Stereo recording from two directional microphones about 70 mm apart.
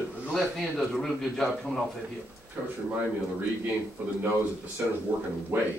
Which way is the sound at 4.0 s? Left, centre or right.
Right.